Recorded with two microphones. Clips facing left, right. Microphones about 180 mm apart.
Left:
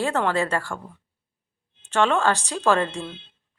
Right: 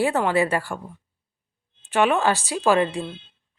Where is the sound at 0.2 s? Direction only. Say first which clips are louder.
Right 2 dB; 15° right (ahead or behind).